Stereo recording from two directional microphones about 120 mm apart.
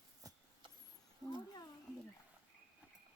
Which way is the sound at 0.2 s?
30° right (ahead or behind).